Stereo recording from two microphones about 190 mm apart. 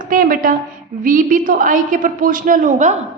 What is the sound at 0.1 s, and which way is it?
A woman's voice, 45° right (ahead or behind).